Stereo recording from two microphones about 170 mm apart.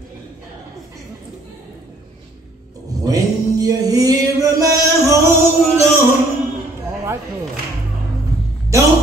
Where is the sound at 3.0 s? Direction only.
20° right (ahead or behind).